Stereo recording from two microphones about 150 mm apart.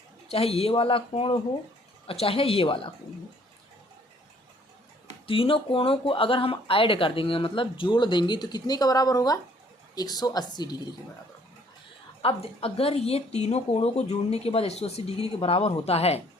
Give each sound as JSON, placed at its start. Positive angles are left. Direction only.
{"t": 0.3, "sound": "speech", "side_deg": 40}
{"t": 5.2, "sound": "a woman's voice", "side_deg": 35}
{"t": 12.2, "sound": "speech", "side_deg": 40}